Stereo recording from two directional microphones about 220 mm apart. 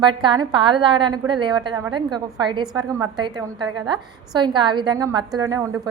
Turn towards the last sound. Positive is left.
turn(degrees=-15)  # may be behind; listen again after turning